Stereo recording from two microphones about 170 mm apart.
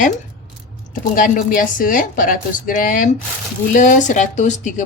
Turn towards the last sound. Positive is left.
turn(degrees=45)  # may be behind; listen again after turning